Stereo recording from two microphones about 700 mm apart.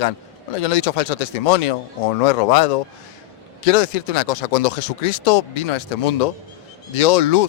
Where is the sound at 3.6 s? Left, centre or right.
Left.